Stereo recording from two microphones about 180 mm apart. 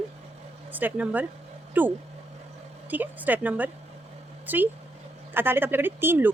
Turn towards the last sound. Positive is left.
turn(degrees=-10)  # may be behind; listen again after turning